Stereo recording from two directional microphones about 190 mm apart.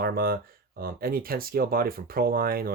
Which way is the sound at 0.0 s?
50° right (ahead or behind).